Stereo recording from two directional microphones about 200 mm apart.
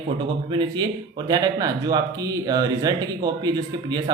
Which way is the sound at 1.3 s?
20° right (ahead or behind).